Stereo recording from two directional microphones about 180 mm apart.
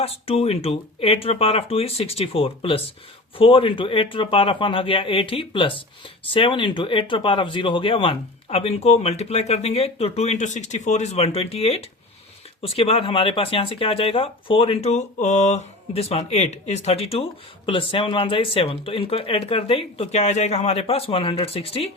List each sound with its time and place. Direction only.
0.0 s a man's voice: 35° left (ahead or behind)